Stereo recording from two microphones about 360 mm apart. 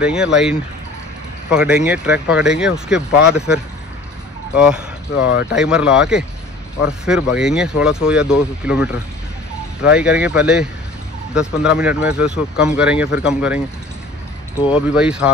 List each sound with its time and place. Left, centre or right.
0.0 s speech: centre
5.2 s speech: left
5.6 s speech: centre
9.9 s speech: centre
15.0 s speech: centre